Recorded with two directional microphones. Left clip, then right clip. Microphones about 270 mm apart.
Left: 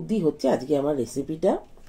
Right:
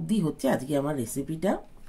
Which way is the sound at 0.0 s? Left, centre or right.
Right.